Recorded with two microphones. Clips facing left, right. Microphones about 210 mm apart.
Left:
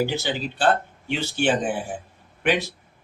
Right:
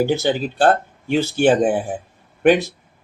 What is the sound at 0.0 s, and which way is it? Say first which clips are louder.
Speech: right 6 dB; 50° right (ahead or behind).